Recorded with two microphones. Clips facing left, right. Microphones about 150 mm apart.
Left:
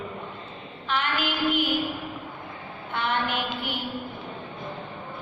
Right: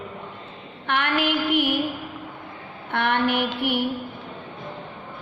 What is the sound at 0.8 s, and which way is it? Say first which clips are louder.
Child singing: right 4 dB; 65° right (ahead or behind).